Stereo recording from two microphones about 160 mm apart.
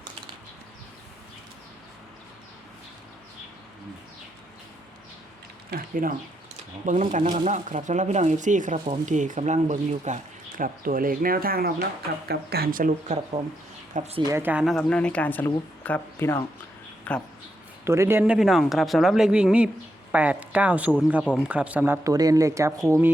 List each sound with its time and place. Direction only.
5.7 s speech: 60° right (ahead or behind)
10.6 s speech: 60° right (ahead or behind)
14.3 s speech: 15° right (ahead or behind)
14.6 s speech: centre (ahead or behind)
17.8 s speech: 15° right (ahead or behind)